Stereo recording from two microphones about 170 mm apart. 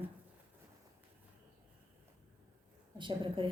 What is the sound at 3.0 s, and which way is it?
Speech, 30° right (ahead or behind).